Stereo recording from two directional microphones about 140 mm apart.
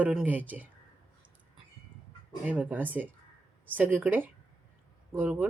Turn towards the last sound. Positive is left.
turn(degrees=-15)  # may be behind; listen again after turning